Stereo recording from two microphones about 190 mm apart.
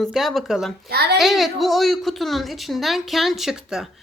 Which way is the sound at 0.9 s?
60° right (ahead or behind).